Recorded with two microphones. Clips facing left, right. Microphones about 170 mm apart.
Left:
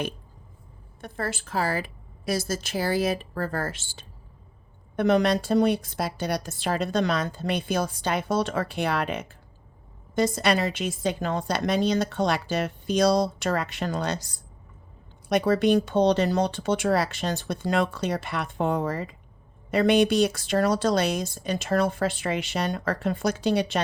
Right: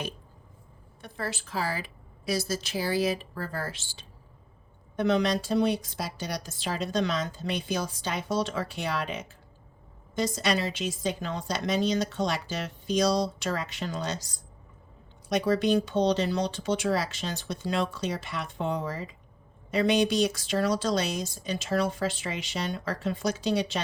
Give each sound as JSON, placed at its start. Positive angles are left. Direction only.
{"t": 1.0, "sound": "a woman's voice", "side_deg": 50}